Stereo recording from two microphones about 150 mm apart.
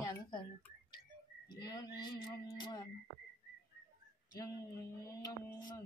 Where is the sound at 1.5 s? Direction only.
25° left (ahead or behind).